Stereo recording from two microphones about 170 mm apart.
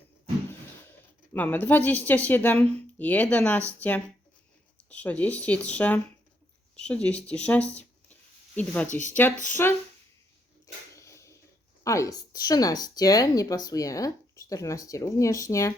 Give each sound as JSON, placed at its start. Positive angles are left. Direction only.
{"t": 1.3, "sound": "speech", "side_deg": 10}
{"t": 10.9, "sound": "a sound", "side_deg": 20}
{"t": 11.8, "sound": "speech", "side_deg": 20}